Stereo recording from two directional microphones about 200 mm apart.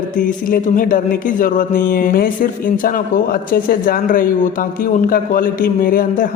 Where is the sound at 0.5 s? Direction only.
45° left (ahead or behind).